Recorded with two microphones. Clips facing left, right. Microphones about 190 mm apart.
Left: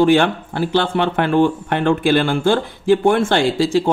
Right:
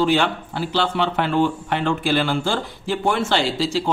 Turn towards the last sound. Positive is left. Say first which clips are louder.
# left 6 dB
turn(degrees=50)  # may be behind; listen again after turning